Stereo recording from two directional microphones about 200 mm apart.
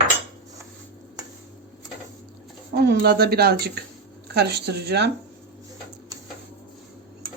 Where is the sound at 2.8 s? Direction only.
50° right (ahead or behind).